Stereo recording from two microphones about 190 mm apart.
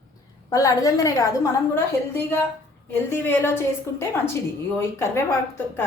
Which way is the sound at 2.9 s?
10° left (ahead or behind).